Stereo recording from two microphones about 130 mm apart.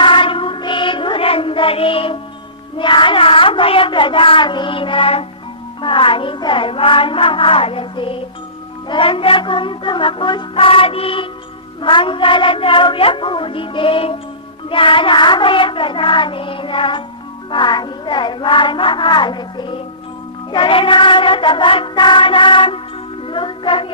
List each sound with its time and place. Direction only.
0.0 s music: 40° left (ahead or behind)
2.7 s a sound: 40° left (ahead or behind)
5.8 s music: 40° left (ahead or behind)